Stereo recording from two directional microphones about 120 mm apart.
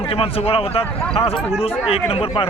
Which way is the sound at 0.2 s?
55° left (ahead or behind).